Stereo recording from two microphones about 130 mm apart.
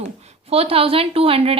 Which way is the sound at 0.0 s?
55° right (ahead or behind).